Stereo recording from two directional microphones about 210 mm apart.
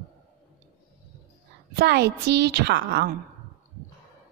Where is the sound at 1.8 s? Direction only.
55° right (ahead or behind).